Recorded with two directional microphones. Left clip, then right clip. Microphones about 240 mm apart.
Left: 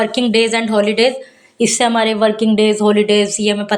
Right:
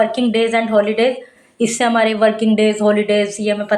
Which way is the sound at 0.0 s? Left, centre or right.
Left.